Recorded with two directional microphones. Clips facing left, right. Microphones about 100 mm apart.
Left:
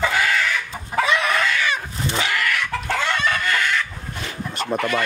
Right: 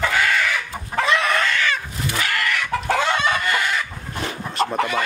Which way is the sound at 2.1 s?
25° left (ahead or behind).